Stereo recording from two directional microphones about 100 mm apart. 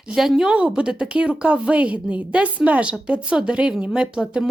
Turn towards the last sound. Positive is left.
turn(degrees=-10)  # may be behind; listen again after turning